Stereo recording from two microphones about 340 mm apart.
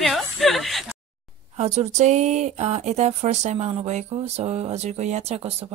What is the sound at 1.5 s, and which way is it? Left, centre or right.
Speech, centre.